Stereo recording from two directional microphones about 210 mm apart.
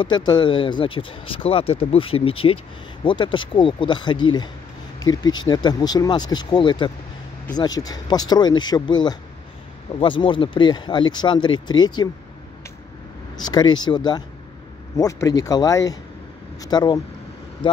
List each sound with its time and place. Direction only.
0.0 s speech: 20° left (ahead or behind)
13.4 s speech: 20° left (ahead or behind)